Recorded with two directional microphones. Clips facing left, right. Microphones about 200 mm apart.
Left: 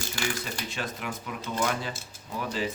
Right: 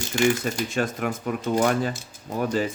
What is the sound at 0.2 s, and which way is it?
Speech, 45° right (ahead or behind).